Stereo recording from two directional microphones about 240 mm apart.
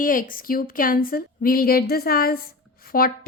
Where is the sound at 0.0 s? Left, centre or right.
Left.